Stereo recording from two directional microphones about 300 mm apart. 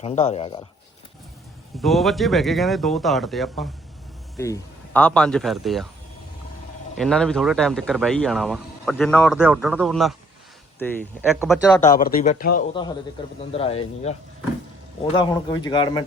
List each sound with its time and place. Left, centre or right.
0.0 s speech: left
1.8 s speech: centre
6.9 s speech: centre
11.9 s speech: left